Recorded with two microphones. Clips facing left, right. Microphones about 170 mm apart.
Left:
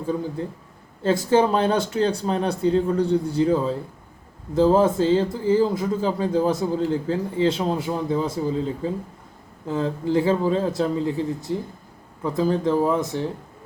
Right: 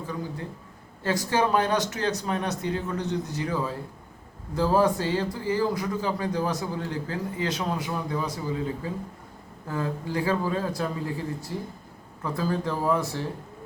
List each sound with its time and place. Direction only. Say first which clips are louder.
1.0 s speech: left 6 dB; 25° left (ahead or behind)